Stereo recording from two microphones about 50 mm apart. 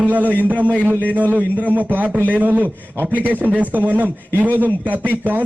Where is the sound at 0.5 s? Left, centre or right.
Left.